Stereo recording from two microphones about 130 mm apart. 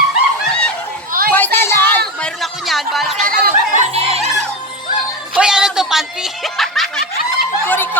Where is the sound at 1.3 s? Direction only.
15° left (ahead or behind).